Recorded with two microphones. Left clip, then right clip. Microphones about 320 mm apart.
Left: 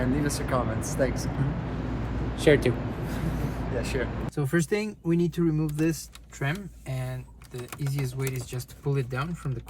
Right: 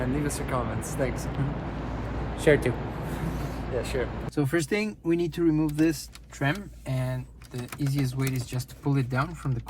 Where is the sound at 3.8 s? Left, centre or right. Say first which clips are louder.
Even; right.